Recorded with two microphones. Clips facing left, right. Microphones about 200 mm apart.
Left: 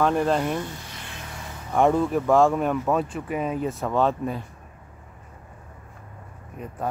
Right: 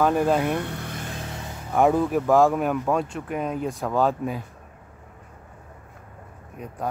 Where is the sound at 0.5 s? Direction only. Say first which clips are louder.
Right 2 dB; 60° right (ahead or behind).